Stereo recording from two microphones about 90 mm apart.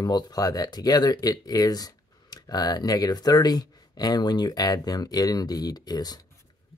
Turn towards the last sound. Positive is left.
turn(degrees=50)  # may be behind; listen again after turning